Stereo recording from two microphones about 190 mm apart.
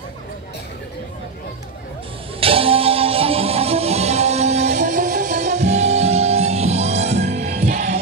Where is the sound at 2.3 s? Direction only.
30° right (ahead or behind).